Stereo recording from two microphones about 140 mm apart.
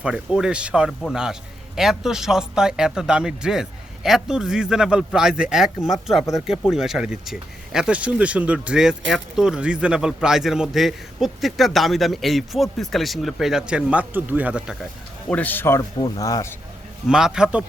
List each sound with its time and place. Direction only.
0.0 s speech: 5° right (ahead or behind)
15.3 s a man's voice: 10° left (ahead or behind)
17.1 s speech: 5° right (ahead or behind)